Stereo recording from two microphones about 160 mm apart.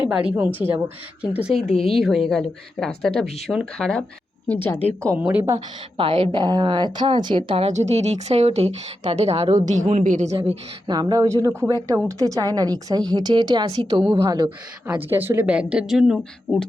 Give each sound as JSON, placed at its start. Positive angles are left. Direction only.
{"t": 0.1, "sound": "a woman's voice", "side_deg": -5}
{"t": 5.1, "sound": "a woman's voice", "side_deg": -10}
{"t": 6.0, "sound": "a woman's voice", "side_deg": -35}
{"t": 10.8, "sound": "a woman's voice", "side_deg": -25}
{"t": 14.8, "sound": "a woman's voice", "side_deg": -10}